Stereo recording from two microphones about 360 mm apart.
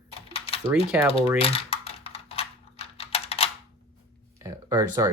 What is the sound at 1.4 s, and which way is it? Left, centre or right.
Typing, centre.